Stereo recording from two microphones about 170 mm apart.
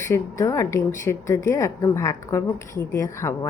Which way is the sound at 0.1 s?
15° left (ahead or behind).